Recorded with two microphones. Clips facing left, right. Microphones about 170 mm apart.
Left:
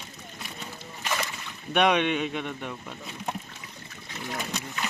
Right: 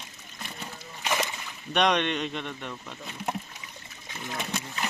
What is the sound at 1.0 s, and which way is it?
Boat, 20° right (ahead or behind).